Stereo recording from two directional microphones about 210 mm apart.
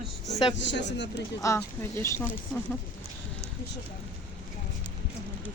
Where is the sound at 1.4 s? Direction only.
15° left (ahead or behind).